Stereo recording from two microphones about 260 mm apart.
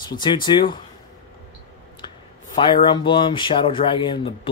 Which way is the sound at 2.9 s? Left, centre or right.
Centre.